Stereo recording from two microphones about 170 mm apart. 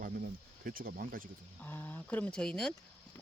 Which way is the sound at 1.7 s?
10° left (ahead or behind).